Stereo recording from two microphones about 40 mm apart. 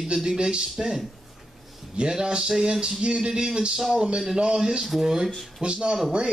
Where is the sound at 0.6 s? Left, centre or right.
Centre.